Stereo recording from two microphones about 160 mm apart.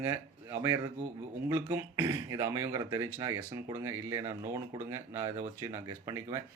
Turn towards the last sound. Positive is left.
turn(degrees=-20)  # may be behind; listen again after turning